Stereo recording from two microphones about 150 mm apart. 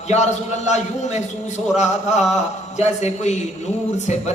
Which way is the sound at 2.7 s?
50° left (ahead or behind).